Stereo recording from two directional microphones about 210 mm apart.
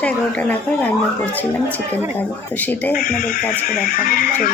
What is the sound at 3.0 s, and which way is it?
Speech, 40° left (ahead or behind).